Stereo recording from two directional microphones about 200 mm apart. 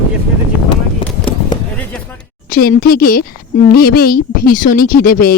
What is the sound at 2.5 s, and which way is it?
A woman's voice, 50° left (ahead or behind).